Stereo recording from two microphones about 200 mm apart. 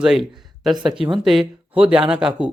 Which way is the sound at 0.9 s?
25° right (ahead or behind).